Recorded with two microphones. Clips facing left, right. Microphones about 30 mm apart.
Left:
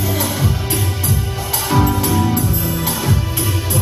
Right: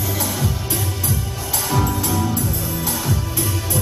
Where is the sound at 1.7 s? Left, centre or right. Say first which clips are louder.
Left 5 dB; left.